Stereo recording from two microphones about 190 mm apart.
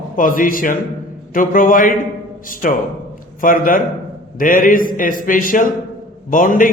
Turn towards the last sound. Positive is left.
turn(degrees=45)  # may be behind; listen again after turning